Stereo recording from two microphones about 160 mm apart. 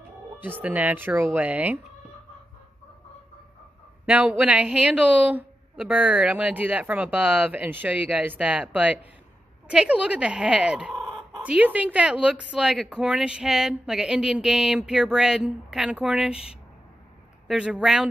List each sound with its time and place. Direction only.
0.4 s a woman's voice: 10° right (ahead or behind)
4.0 s a woman's voice: 10° right (ahead or behind)
11.4 s a woman's voice: 10° right (ahead or behind)